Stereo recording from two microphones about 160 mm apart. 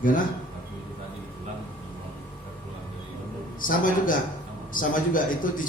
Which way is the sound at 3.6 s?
60° left (ahead or behind).